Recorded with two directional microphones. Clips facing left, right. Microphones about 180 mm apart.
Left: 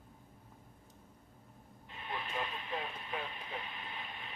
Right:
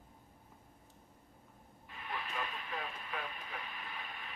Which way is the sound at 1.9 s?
25° left (ahead or behind).